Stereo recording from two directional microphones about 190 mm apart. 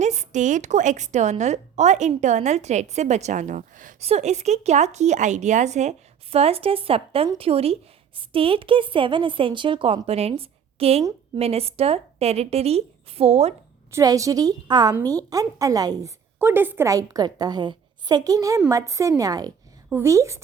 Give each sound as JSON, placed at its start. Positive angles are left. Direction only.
{"t": 0.0, "sound": "a woman's voice", "side_deg": -35}
{"t": 13.9, "sound": "a woman's voice", "side_deg": -20}